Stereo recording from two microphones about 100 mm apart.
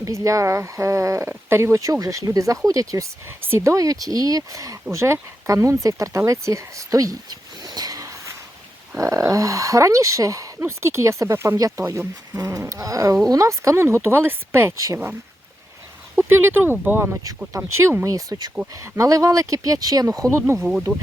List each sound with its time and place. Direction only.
0.0 s speech: 30° right (ahead or behind)
16.1 s speech: 20° right (ahead or behind)
20.6 s speech: 5° right (ahead or behind)